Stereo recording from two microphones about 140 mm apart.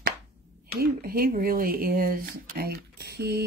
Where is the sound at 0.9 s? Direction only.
90° right.